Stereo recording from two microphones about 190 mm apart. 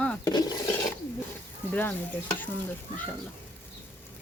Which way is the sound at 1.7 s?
10° left (ahead or behind).